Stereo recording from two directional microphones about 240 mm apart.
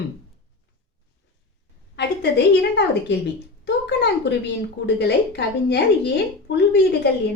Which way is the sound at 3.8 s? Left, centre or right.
Left.